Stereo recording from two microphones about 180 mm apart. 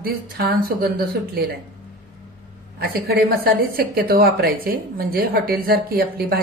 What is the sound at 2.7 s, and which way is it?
A woman's voice, 60° right (ahead or behind).